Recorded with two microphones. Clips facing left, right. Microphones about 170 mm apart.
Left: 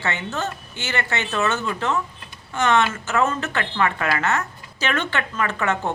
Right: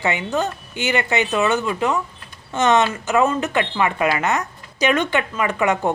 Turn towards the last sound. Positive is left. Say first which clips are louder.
# right 4 dB
turn(degrees=-15)  # may be behind; listen again after turning